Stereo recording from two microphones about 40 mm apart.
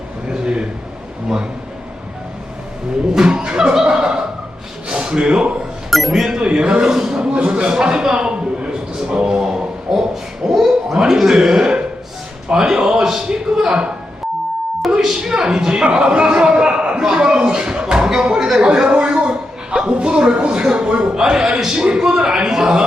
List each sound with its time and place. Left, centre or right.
0.3 s a sound: right
3.2 s a man's voice: right
5.9 s a man's voice: centre
6.4 s a man's voice: right
7.3 s a man's voice: right
9.9 s hoot: centre
10.5 s a sound: centre
10.9 s a man's voice: centre
15.1 s a man's voice: centre